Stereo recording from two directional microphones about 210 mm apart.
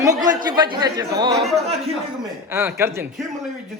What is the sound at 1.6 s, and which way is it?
Speech, 30° right (ahead or behind).